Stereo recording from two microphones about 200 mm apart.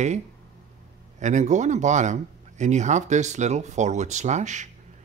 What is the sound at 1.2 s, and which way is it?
Speech, 35° right (ahead or behind).